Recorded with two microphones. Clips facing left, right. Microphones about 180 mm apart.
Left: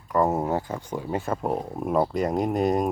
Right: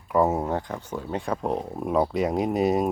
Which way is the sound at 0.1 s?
5° right (ahead or behind).